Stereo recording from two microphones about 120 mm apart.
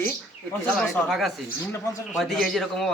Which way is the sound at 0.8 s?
Centre (ahead or behind).